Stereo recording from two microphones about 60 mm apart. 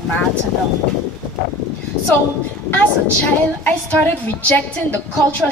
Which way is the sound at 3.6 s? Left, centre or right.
Left.